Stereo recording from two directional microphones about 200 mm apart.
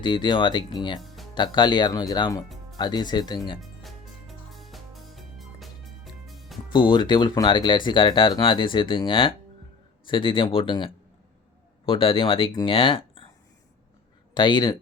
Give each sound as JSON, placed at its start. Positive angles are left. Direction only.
{"t": 0.0, "sound": "speech", "side_deg": 25}
{"t": 1.0, "sound": "music", "side_deg": 0}
{"t": 1.4, "sound": "speech", "side_deg": 20}
{"t": 3.6, "sound": "music", "side_deg": 0}
{"t": 6.7, "sound": "speech", "side_deg": 20}
{"t": 14.3, "sound": "speech", "side_deg": 20}